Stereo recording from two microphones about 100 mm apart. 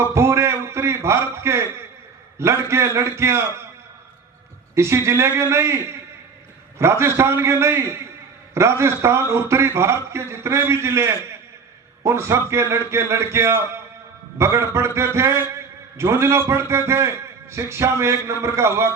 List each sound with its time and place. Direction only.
0.1 s a man's voice: 30° right (ahead or behind)
4.7 s a man's voice: 25° right (ahead or behind)